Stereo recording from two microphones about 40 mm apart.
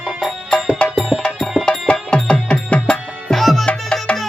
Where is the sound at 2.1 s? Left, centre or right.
Left.